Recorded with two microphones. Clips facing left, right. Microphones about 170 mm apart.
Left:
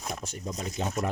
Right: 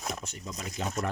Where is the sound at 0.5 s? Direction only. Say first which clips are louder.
Left 2 dB; 25° left (ahead or behind).